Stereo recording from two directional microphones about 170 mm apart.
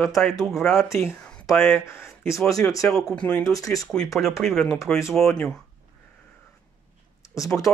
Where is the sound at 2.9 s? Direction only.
5° left (ahead or behind).